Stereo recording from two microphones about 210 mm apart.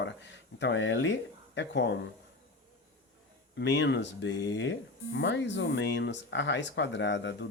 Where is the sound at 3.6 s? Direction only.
55° left (ahead or behind).